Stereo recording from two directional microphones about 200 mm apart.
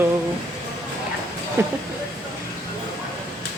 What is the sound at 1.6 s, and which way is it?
Speech, 15° right (ahead or behind).